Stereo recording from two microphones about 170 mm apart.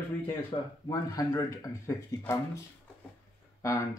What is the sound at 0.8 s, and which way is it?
Speech, 20° left (ahead or behind).